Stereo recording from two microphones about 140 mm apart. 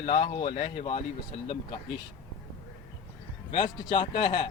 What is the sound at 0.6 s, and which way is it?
Speech, 65° left (ahead or behind).